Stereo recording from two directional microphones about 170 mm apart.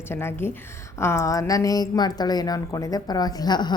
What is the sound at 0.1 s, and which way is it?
A woman's voice, 15° left (ahead or behind).